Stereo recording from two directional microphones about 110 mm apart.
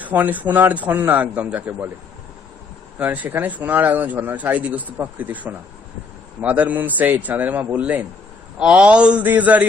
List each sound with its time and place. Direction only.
0.0 s speech: 15° right (ahead or behind)
3.0 s speech: 15° right (ahead or behind)